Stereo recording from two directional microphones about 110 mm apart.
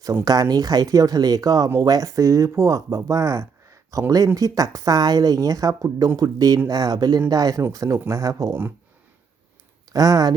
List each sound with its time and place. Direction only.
0.0 s speech: 30° right (ahead or behind)
9.9 s speech: 35° right (ahead or behind)